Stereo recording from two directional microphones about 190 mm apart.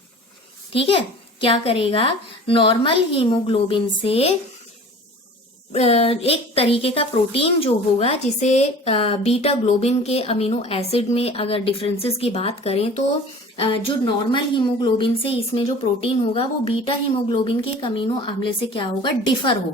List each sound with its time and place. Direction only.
0.7 s a woman's voice: 30° left (ahead or behind)
5.7 s a woman's voice: 35° left (ahead or behind)